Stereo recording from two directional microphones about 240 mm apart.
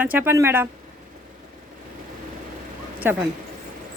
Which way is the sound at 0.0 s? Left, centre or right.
Centre.